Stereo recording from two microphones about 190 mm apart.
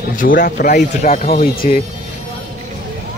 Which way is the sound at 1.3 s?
50° left (ahead or behind).